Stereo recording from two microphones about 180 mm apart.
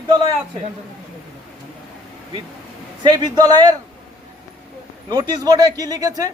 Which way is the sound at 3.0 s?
20° right (ahead or behind).